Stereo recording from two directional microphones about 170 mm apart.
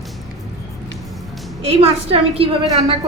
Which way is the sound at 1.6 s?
35° right (ahead or behind).